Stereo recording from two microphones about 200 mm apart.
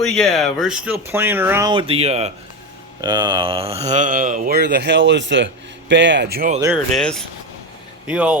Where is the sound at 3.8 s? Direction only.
40° right (ahead or behind).